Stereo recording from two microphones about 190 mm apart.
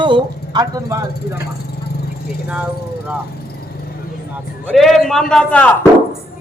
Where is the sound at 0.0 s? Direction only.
25° right (ahead or behind).